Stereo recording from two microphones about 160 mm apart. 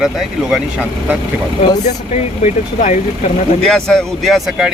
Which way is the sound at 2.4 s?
50° left (ahead or behind).